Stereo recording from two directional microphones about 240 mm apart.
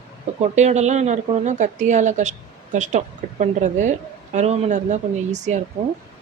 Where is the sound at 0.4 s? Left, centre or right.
Right.